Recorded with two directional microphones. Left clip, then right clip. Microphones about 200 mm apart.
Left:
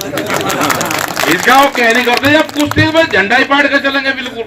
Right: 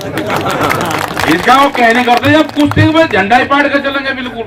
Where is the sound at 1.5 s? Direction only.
35° right (ahead or behind).